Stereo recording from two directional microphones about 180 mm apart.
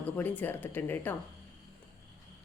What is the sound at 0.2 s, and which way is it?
Speech, 10° left (ahead or behind).